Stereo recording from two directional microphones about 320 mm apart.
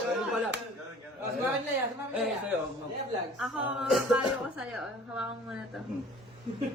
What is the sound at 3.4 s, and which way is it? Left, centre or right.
Speech, centre.